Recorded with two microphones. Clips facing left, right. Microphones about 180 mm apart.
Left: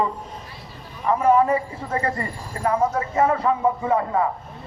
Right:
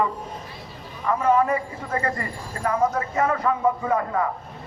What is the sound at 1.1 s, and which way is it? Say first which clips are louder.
A man's voice: left 3 dB; 30° left (ahead or behind).